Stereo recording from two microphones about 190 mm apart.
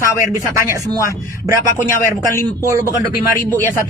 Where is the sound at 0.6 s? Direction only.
15° right (ahead or behind).